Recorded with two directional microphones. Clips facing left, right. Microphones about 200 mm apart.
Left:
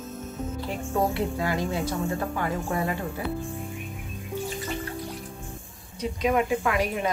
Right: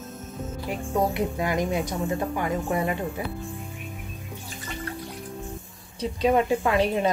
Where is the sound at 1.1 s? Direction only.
15° right (ahead or behind).